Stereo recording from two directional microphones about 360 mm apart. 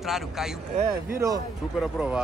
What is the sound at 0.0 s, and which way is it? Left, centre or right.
Speech, centre.